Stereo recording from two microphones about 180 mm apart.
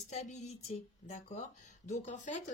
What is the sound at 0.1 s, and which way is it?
Speech, 40° left (ahead or behind).